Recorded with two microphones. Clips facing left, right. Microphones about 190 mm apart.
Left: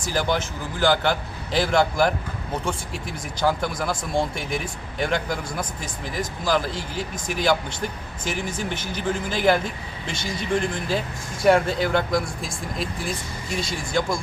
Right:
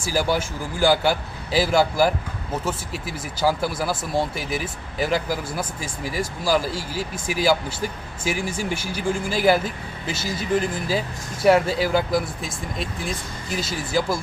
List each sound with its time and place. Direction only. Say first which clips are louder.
0.0 s a man's voice: right 2 dB; 10° right (ahead or behind)